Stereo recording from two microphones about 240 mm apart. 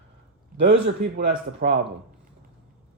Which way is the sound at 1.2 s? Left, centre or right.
Right.